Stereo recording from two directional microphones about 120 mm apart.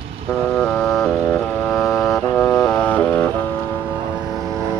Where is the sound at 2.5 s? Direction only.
5° left (ahead or behind).